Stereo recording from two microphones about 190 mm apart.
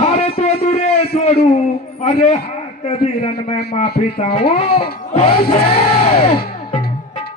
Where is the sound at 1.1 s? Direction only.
35° left (ahead or behind).